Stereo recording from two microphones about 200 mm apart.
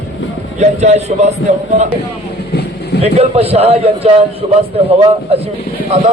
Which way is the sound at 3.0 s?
30° right (ahead or behind).